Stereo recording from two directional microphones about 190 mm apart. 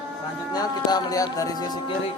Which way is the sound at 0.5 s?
20° left (ahead or behind).